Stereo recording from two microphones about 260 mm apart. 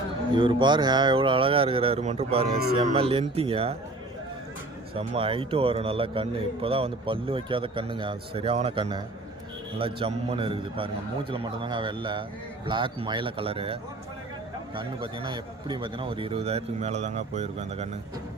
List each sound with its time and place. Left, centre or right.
0.3 s a man's voice: centre
4.9 s a man's voice: right
14.8 s a man's voice: centre